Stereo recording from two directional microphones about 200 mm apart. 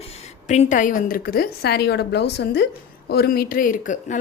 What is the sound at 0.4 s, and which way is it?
A woman's voice, 35° left (ahead or behind).